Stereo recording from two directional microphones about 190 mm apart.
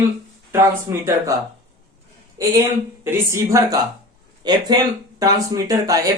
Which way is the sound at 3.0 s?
15° right (ahead or behind).